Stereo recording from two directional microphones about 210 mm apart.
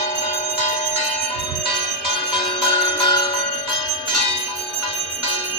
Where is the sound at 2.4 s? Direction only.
25° left (ahead or behind).